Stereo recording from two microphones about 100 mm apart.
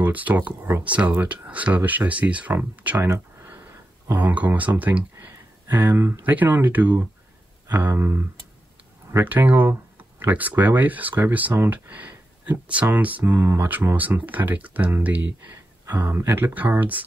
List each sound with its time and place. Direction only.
0.0 s speech: 15° right (ahead or behind)
4.1 s speech: 15° right (ahead or behind)